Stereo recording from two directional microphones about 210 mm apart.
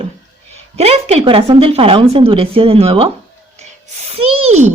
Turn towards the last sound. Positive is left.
turn(degrees=-30)  # may be behind; listen again after turning